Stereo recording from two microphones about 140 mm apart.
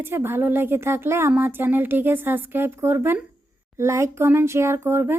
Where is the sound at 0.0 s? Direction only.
15° right (ahead or behind).